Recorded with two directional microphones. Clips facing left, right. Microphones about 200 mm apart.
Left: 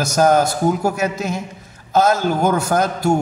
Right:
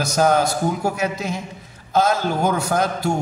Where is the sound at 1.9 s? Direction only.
45° left (ahead or behind).